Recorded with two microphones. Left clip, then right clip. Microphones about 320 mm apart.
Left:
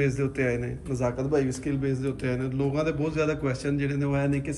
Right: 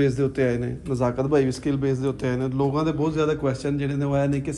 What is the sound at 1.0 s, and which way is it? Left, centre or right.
A man's voice, centre.